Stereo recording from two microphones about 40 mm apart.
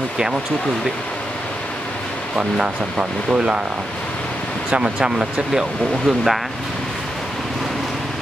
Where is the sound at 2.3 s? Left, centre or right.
Right.